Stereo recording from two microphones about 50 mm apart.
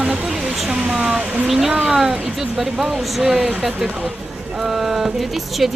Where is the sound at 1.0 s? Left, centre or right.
Right.